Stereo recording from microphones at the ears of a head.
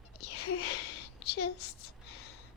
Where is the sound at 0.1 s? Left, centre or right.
Left.